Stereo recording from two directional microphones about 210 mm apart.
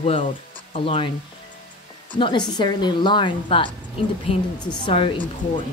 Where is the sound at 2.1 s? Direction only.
20° left (ahead or behind).